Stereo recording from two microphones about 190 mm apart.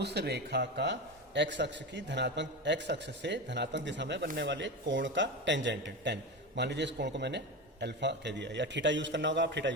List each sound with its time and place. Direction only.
0.0 s a man's voice: 60° right (ahead or behind)